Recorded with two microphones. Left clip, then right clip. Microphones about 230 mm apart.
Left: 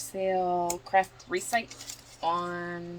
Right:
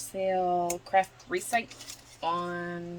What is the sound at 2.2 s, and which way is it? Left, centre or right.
Speech, right.